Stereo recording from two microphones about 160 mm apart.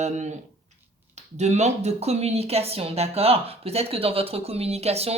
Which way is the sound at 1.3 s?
45° right (ahead or behind).